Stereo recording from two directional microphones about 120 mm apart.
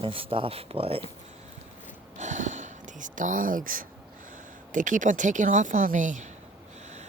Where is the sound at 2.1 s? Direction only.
85° right.